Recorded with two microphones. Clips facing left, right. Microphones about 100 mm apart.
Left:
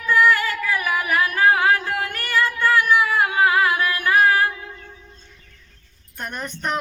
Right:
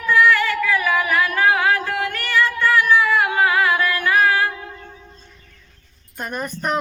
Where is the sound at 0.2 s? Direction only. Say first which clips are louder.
Right 2 dB; 35° left (ahead or behind).